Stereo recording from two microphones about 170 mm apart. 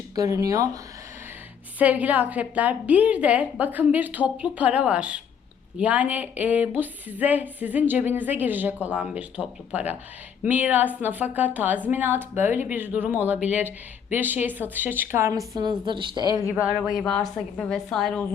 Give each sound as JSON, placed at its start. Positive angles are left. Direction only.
{"t": 0.2, "sound": "speech", "side_deg": -20}
{"t": 1.8, "sound": "a woman's voice", "side_deg": -10}
{"t": 16.5, "sound": "speech", "side_deg": -10}